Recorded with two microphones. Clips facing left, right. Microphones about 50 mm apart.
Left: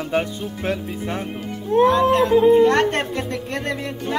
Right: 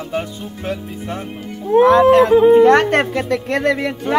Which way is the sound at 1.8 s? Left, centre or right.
Right.